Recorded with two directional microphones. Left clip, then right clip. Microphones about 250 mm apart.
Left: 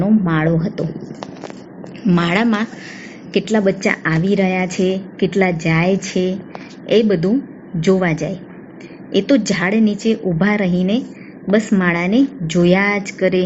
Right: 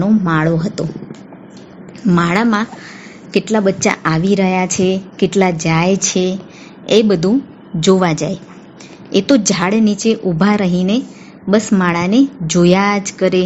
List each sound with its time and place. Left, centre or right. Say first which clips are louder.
0.0 s speech: right 2 dB; right
2.0 s a woman's voice: right 2 dB; right